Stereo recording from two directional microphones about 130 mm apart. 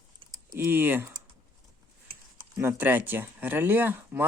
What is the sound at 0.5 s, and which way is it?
Speech, 15° right (ahead or behind).